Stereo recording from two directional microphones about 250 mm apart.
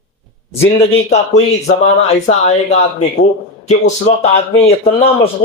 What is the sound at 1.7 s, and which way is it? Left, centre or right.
A man's voice, left.